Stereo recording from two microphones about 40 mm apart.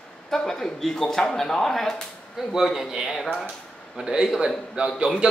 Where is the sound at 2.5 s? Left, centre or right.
Centre.